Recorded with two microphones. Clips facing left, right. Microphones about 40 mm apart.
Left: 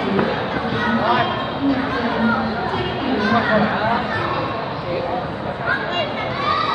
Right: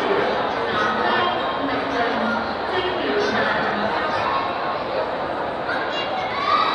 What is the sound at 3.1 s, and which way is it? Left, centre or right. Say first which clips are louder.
Chatter: left 5 dB; left.